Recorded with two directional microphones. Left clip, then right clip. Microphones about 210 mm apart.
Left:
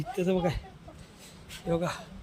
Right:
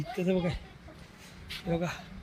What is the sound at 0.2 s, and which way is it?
Speech, 10° left (ahead or behind).